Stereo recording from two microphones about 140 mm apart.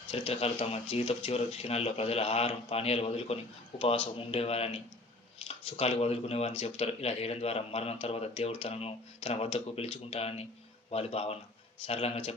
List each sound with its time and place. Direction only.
0.1 s speech: 45° left (ahead or behind)